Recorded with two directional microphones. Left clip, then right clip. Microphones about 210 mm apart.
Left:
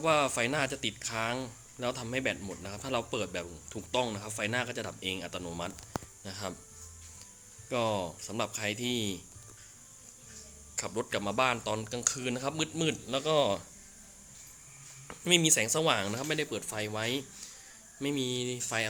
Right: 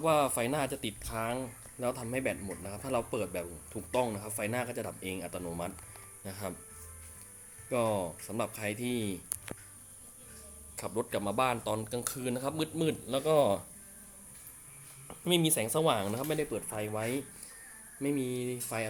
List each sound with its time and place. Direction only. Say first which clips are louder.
0.0 s speech: left 1 dB; centre (ahead or behind)
7.7 s speech: even; 5° right (ahead or behind)
10.8 s speech: left 1 dB; centre (ahead or behind)
15.0 s speech: left 3 dB; centre (ahead or behind)
16.5 s speech: even; 10° left (ahead or behind)